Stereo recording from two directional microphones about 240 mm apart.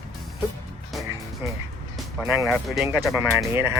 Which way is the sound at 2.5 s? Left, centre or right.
Centre.